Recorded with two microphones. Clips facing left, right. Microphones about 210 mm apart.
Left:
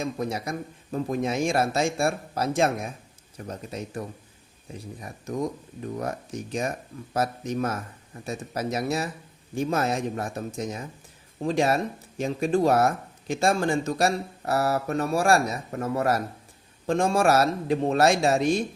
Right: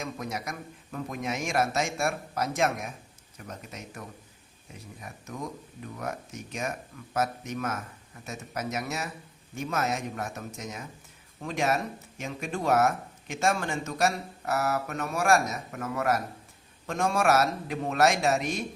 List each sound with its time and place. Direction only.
0.0 s speech: 30° left (ahead or behind)